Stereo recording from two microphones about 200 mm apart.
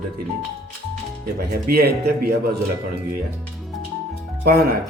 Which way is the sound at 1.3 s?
50° right (ahead or behind).